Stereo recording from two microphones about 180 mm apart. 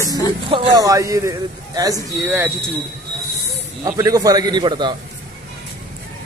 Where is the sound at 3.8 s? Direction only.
20° right (ahead or behind).